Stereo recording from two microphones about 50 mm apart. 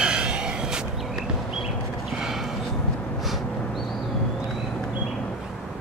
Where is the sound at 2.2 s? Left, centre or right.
Centre.